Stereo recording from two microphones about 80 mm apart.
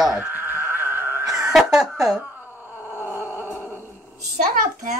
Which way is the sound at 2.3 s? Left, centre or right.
Right.